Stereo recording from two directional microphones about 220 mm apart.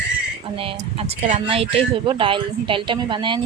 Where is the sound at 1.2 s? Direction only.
25° right (ahead or behind).